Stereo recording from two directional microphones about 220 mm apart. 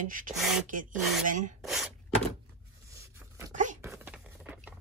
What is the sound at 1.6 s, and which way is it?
Gasp, centre (ahead or behind).